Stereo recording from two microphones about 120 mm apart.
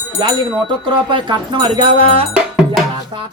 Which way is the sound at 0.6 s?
40° right (ahead or behind).